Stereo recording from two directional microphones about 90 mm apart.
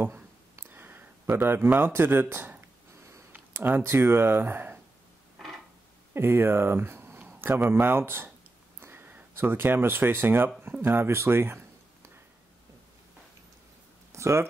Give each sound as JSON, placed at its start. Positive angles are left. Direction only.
{"t": 0.0, "sound": "a sound", "side_deg": -25}
{"t": 1.4, "sound": "speech", "side_deg": -25}
{"t": 6.1, "sound": "speech", "side_deg": -25}
{"t": 14.1, "sound": "speech", "side_deg": -30}